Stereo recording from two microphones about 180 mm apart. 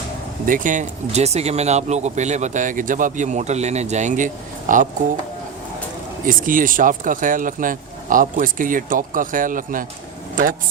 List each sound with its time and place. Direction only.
0.4 s speech: 45° right (ahead or behind)
6.2 s speech: 50° right (ahead or behind)